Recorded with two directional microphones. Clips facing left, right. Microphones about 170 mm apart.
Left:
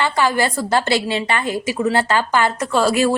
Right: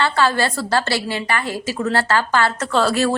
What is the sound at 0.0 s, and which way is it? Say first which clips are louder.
A woman's voice: even; 15° left (ahead or behind).